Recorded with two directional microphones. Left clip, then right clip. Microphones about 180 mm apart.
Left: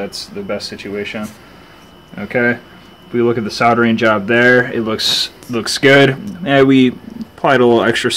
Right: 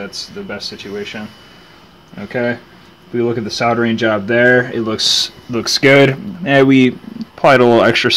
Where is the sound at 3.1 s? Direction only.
25° right (ahead or behind).